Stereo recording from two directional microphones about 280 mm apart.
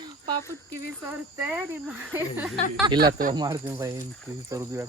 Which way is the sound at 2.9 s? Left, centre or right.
Right.